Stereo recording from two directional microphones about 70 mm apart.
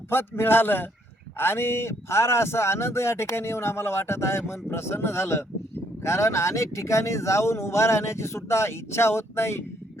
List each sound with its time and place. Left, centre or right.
0.1 s speech: left